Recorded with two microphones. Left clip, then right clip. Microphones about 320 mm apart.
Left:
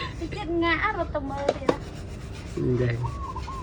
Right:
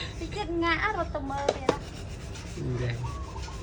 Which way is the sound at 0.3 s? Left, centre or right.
Centre.